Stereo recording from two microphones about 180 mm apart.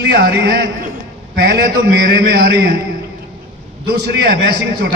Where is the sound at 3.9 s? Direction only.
60° right (ahead or behind).